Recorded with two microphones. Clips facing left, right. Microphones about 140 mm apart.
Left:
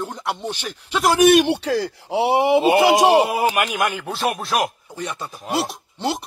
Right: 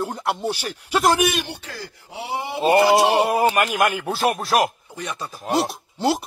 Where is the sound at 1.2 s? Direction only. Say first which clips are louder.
Left 10 dB; 70° left (ahead or behind).